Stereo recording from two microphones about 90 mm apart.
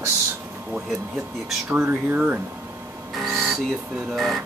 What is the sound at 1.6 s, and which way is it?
Speech, 25° right (ahead or behind).